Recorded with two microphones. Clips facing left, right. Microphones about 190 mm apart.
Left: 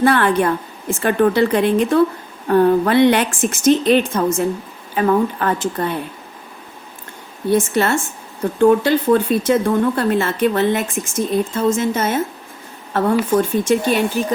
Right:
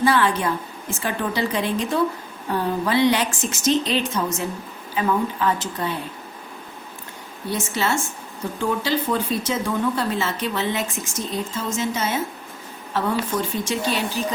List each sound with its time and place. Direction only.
0.0 s speech: 60° left (ahead or behind)
7.5 s speech: 55° left (ahead or behind)